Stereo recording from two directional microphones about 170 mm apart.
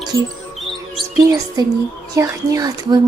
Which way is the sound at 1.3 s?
20° right (ahead or behind).